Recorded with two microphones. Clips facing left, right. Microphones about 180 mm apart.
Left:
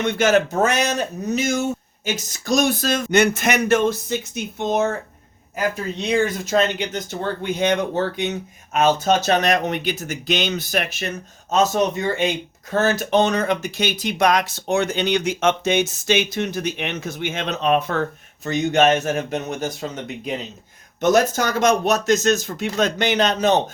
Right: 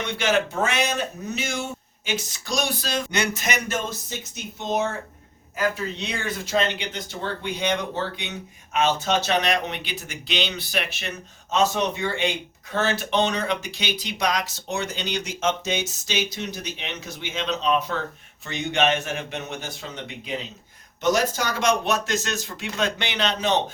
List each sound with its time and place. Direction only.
0.0 s speech: 45° left (ahead or behind)
6.2 s speech: 45° left (ahead or behind)
18.4 s speech: 40° left (ahead or behind)